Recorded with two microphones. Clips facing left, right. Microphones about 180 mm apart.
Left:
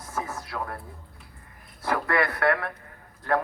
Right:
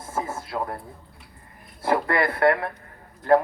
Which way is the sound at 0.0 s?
25° right (ahead or behind).